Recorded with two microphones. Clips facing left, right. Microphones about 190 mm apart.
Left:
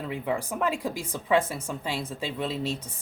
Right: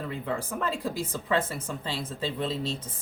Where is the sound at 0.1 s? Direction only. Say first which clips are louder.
Left 5 dB; 15° left (ahead or behind).